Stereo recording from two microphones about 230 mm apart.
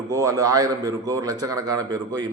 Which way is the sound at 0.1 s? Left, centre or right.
Centre.